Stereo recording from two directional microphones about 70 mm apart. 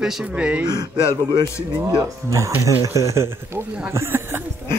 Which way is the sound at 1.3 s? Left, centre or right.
Right.